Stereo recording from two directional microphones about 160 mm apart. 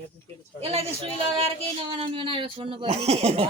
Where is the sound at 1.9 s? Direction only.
35° right (ahead or behind).